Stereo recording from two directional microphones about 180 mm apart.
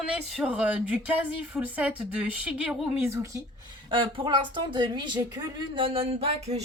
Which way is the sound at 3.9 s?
30° right (ahead or behind).